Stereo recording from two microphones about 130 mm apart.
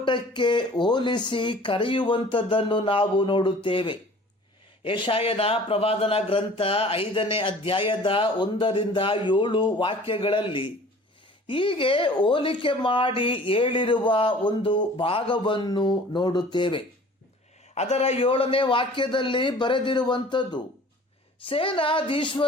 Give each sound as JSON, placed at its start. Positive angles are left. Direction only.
{"t": 0.0, "sound": "speech", "side_deg": 40}
{"t": 17.7, "sound": "speech", "side_deg": 55}